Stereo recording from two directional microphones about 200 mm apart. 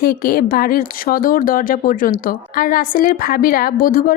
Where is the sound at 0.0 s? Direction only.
45° left (ahead or behind).